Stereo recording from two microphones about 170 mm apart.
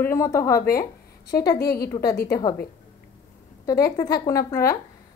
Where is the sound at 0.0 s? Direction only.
15° left (ahead or behind).